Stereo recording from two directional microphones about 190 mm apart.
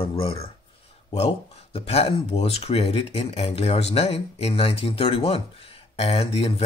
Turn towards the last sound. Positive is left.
turn(degrees=30)  # may be behind; listen again after turning